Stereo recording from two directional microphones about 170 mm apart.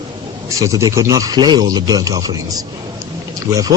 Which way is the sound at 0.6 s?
20° right (ahead or behind).